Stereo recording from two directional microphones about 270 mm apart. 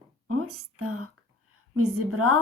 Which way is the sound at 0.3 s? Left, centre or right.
Right.